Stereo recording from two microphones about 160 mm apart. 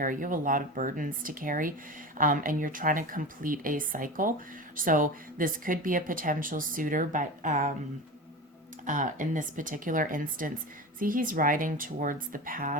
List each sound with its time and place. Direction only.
0.0 s speech: 55° right (ahead or behind)
8.9 s speech: 55° right (ahead or behind)